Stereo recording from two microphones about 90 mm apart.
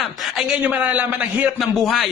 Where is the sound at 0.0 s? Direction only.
Centre (ahead or behind).